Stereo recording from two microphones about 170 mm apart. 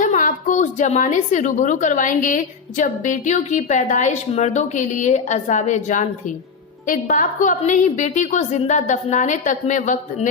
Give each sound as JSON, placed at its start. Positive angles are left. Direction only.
{"t": 0.0, "sound": "a woman's voice", "side_deg": 50}